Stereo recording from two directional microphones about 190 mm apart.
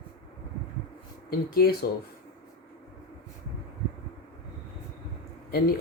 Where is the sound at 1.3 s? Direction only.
55° left (ahead or behind).